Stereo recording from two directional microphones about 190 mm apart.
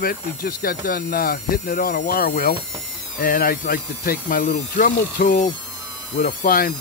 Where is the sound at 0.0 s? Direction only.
50° left (ahead or behind).